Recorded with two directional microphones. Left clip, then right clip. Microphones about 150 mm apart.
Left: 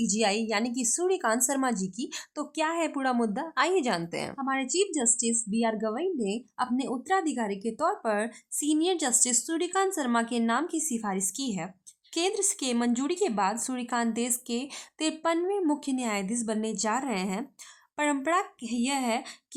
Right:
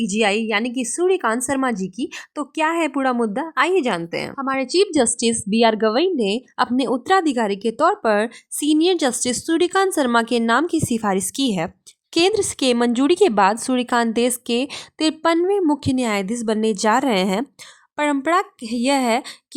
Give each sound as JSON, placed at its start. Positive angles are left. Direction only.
{"t": 0.0, "sound": "a woman's voice", "side_deg": -35}
{"t": 17.9, "sound": "speech", "side_deg": -40}